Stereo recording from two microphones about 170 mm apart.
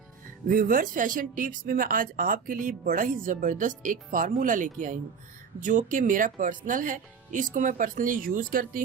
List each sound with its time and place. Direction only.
0.4 s speech: 55° right (ahead or behind)